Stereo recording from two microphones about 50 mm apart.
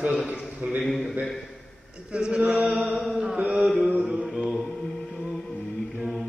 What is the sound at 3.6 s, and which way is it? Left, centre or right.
Chant, centre.